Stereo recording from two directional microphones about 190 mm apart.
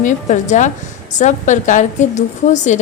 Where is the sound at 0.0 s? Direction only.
40° left (ahead or behind).